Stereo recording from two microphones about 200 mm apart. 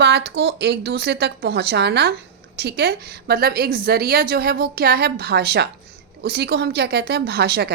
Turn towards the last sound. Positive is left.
turn(degrees=-55)  # may be behind; listen again after turning